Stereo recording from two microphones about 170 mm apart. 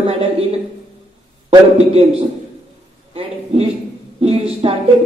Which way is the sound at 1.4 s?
40° right (ahead or behind).